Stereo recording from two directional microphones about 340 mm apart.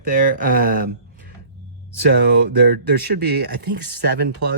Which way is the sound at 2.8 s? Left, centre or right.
Right.